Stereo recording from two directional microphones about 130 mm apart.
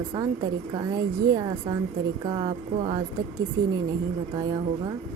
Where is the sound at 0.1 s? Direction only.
30° right (ahead or behind).